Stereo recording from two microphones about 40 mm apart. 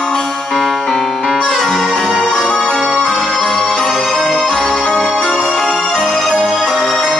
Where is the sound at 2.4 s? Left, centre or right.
Left.